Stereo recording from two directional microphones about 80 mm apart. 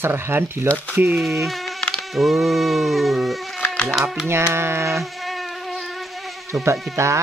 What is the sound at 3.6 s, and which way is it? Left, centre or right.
Mosquito, centre.